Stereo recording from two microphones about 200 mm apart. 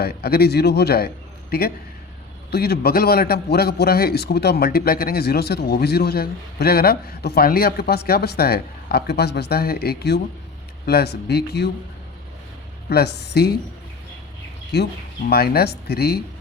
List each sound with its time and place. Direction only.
0.0 s a man's voice: 50° left (ahead or behind)
12.9 s a man's voice: 55° left (ahead or behind)
14.7 s a man's voice: 55° left (ahead or behind)